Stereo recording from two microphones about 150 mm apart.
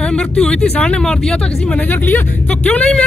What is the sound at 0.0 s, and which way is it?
Speech, 5° left (ahead or behind).